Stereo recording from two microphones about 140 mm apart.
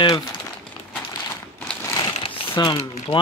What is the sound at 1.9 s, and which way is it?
Crumpling, 35° left (ahead or behind).